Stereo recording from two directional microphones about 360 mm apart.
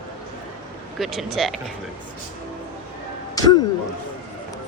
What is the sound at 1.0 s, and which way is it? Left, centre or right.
Speech, centre.